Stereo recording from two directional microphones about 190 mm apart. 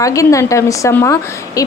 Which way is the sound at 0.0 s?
15° left (ahead or behind).